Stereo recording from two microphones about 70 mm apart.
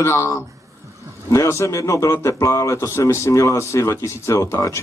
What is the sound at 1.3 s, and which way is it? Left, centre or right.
A man's voice, left.